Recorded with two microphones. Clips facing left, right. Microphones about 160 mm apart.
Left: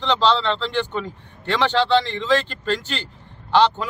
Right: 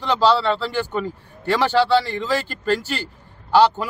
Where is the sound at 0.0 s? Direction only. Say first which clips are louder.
Right 2 dB; 10° right (ahead or behind).